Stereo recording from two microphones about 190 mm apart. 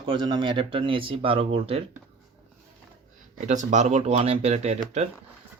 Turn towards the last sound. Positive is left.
turn(degrees=-35)  # may be behind; listen again after turning